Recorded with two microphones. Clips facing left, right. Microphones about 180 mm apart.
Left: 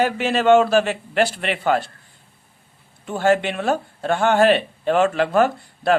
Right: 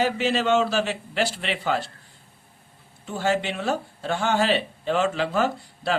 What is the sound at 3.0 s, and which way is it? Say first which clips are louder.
Speech: left 6 dB; 55° left (ahead or behind).